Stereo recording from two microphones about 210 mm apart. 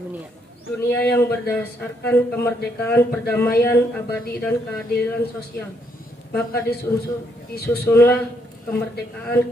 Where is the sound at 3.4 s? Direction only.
45° left (ahead or behind).